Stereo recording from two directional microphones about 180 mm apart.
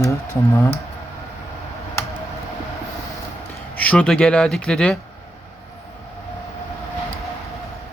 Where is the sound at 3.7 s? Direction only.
10° left (ahead or behind).